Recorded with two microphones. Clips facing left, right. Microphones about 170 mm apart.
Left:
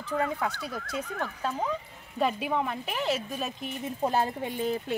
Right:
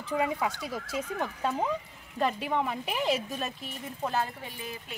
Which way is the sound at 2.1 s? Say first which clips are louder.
Left 1 dB; 10° left (ahead or behind).